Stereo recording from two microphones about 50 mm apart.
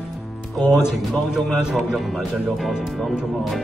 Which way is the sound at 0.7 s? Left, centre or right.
Centre.